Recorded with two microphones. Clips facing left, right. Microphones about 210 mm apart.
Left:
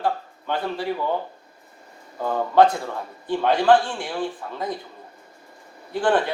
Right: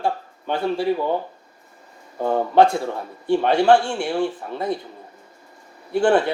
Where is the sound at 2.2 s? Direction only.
25° right (ahead or behind).